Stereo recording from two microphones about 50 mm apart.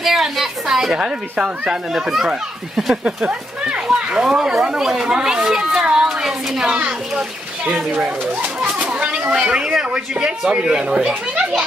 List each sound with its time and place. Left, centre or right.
0.0 s speech: centre
3.8 s speech: centre
8.4 s speech: right
9.3 s speech: centre